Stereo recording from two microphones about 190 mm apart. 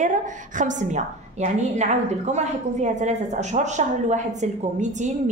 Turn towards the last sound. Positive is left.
turn(degrees=-40)  # may be behind; listen again after turning